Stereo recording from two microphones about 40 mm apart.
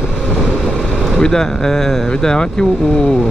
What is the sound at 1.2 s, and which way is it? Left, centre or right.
Speech, centre.